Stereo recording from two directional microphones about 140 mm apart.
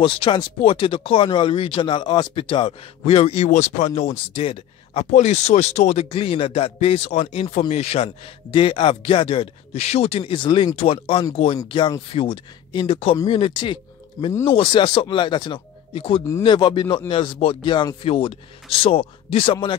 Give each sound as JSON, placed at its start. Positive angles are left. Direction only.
{"t": 0.0, "sound": "speech", "side_deg": 40}
{"t": 3.4, "sound": "speech", "side_deg": 55}
{"t": 6.0, "sound": "speech", "side_deg": 40}